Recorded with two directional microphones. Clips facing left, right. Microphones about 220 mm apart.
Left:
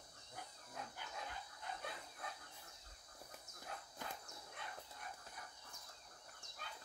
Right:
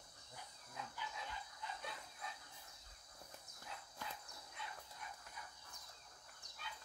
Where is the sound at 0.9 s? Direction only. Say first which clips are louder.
Even; 50° left (ahead or behind).